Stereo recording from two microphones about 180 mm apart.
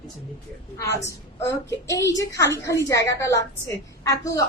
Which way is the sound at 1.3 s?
15° left (ahead or behind).